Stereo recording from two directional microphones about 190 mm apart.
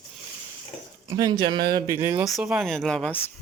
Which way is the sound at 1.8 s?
15° right (ahead or behind).